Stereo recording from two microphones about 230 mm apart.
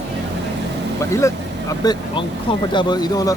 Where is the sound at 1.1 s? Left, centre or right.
Centre.